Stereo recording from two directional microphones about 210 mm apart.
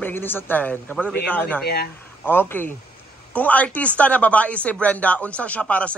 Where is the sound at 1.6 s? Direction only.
50° left (ahead or behind).